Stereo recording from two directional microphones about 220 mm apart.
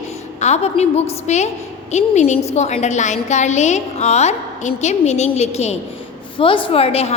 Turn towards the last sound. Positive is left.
turn(degrees=25)  # may be behind; listen again after turning